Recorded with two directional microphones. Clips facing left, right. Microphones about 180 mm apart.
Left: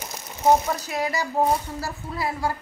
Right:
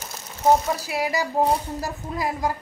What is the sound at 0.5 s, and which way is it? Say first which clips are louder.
A woman's voice: even; 10° right (ahead or behind).